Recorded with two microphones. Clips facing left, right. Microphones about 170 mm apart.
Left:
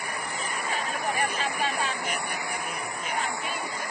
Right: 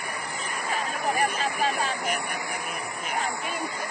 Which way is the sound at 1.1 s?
40° right (ahead or behind).